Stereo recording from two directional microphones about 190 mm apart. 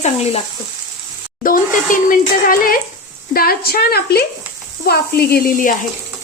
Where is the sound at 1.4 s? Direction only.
45° left (ahead or behind).